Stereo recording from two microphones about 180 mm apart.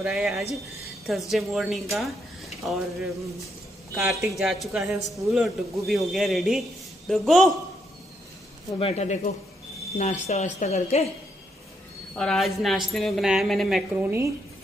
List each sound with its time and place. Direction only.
0.0 s a man's voice: 5° right (ahead or behind)
4.2 s a man's voice: centre (ahead or behind)
8.7 s speech: 35° left (ahead or behind)
12.2 s a man's voice: centre (ahead or behind)
13.9 s a woman's voice: 10° right (ahead or behind)